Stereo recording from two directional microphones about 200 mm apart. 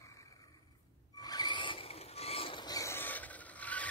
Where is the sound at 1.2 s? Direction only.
20° left (ahead or behind).